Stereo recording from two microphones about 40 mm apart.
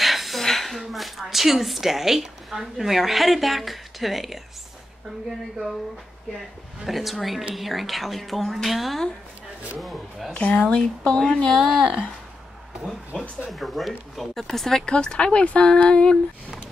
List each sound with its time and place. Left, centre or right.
0.0 s speech: centre
6.9 s speech: centre
10.3 s speech: left
13.1 s speech: left
13.5 s speech: centre
14.9 s speech: left